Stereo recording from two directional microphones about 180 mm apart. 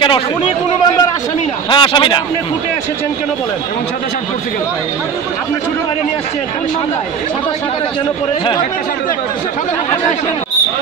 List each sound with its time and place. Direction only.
1.7 s speech: 25° left (ahead or behind)